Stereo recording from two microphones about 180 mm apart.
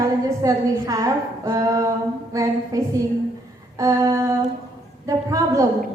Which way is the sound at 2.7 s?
20° right (ahead or behind).